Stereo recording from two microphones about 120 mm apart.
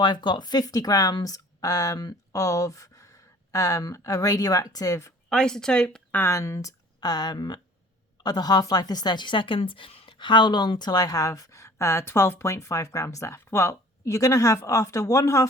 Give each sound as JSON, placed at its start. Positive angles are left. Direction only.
{"t": 0.0, "sound": "a woman's voice", "side_deg": 40}
{"t": 5.3, "sound": "speech", "side_deg": 5}
{"t": 6.1, "sound": "a woman's voice", "side_deg": 25}